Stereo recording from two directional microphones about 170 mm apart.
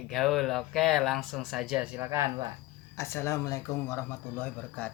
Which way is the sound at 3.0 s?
15° left (ahead or behind).